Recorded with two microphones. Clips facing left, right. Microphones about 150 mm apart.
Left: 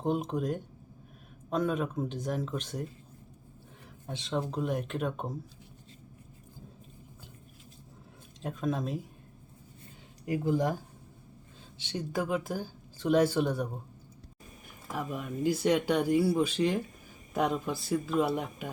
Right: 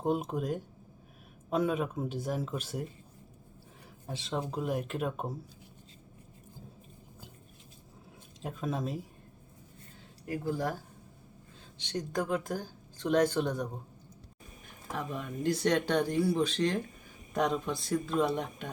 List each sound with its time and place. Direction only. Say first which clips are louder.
0.0 s speech: left 1 dB; 5° right (ahead or behind)
4.0 s speech: left 2 dB; centre (ahead or behind)
8.4 s speech: left 2 dB; centre (ahead or behind)
10.2 s speech: left 4 dB; 20° left (ahead or behind)
11.8 s speech: even; 5° left (ahead or behind)
14.8 s speech: left 1 dB; 5° left (ahead or behind)